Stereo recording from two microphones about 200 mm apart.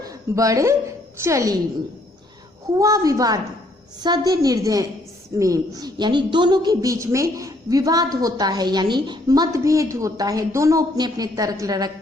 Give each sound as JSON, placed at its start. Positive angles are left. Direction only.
{"t": 0.0, "sound": "a woman's voice", "side_deg": -15}
{"t": 2.7, "sound": "a woman's voice", "side_deg": -15}